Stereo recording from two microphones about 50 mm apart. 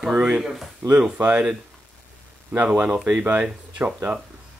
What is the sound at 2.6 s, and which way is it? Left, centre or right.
Speech, right.